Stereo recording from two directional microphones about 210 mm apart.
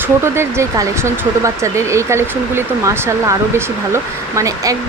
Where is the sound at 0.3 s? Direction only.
15° right (ahead or behind).